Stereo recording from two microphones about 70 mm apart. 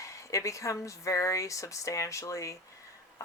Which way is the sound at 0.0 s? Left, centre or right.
Left.